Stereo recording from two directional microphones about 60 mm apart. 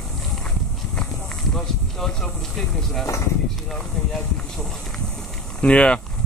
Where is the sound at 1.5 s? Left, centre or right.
Centre.